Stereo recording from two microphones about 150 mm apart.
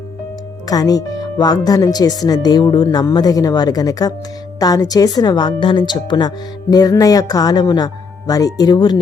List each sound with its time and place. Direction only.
0.7 s speech: 25° left (ahead or behind)